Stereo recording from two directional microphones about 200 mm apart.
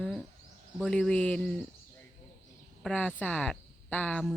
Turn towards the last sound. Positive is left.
turn(degrees=5)  # may be behind; listen again after turning